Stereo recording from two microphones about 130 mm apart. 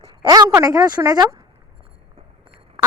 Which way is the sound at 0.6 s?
30° right (ahead or behind).